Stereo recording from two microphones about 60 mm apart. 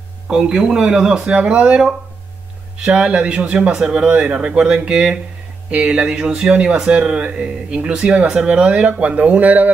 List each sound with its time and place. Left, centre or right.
0.3 s speech: centre; by 9.7 s right